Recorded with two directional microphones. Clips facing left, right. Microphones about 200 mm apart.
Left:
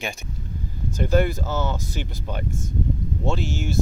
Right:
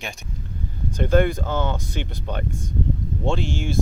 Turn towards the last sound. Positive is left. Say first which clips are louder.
# right 1 dB
turn(degrees=45)  # may be behind; listen again after turning